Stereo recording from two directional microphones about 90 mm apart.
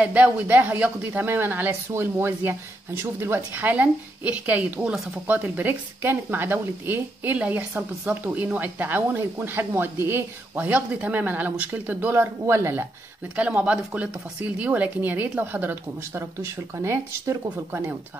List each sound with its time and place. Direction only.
0.0 s a woman's voice: 15° right (ahead or behind)
12.4 s speech: 30° right (ahead or behind)
13.4 s speech: 15° right (ahead or behind); by 17.9 s 35° right (ahead or behind)